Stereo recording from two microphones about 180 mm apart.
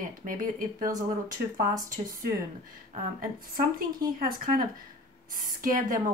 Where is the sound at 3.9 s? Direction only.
55° right (ahead or behind).